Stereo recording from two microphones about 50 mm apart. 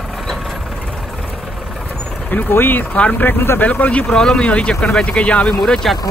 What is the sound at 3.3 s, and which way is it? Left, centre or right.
Speech, left.